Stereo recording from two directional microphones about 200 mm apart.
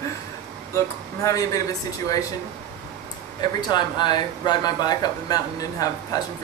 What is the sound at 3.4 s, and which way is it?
Speech, 20° left (ahead or behind).